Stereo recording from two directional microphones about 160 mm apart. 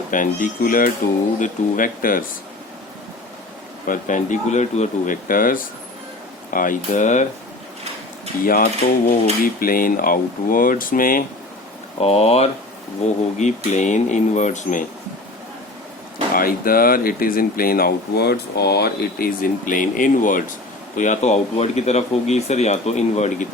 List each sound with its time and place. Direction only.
0.1 s speech: 55° left (ahead or behind)
3.8 s speech: 50° left (ahead or behind)
8.4 s speech: 65° left (ahead or behind)
11.9 s speech: 40° left (ahead or behind)
13.7 s speech: 45° left (ahead or behind)
16.3 s speech: 65° left (ahead or behind); by 23.5 s 45° left (ahead or behind)